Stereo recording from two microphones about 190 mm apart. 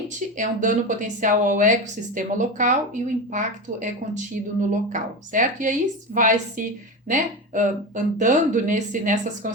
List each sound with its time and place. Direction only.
0.3 s a woman's voice: 40° right (ahead or behind)